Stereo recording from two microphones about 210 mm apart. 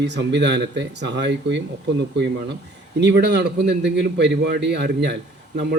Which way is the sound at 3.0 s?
55° right (ahead or behind).